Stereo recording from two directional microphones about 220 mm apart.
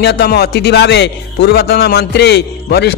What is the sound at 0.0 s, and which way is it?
Speech, 50° left (ahead or behind).